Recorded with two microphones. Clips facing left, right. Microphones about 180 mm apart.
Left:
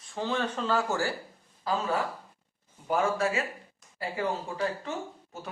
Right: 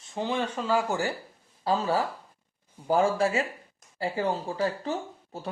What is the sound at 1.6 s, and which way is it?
A man's voice, 30° right (ahead or behind).